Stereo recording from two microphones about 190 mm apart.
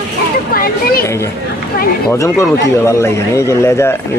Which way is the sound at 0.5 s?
50° left (ahead or behind).